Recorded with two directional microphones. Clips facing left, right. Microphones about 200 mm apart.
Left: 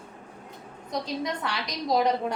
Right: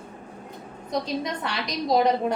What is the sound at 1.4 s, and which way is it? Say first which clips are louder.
Speech: right 2 dB; 20° right (ahead or behind).